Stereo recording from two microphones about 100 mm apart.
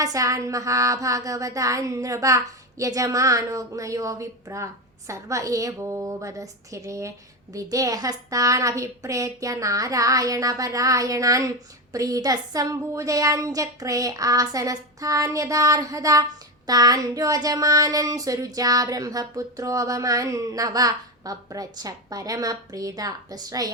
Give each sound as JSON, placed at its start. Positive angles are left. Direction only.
{"t": 0.0, "sound": "a child's voice", "side_deg": -35}